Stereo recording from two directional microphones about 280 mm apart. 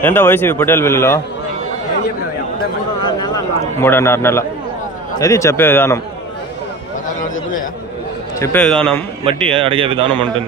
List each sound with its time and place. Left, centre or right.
0.0 s a man's voice: centre
3.3 s a man's voice: centre
8.4 s a man's voice: centre
9.5 s speech: centre